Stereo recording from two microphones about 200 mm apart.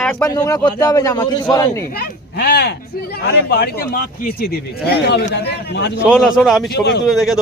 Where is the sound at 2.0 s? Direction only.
50° left (ahead or behind).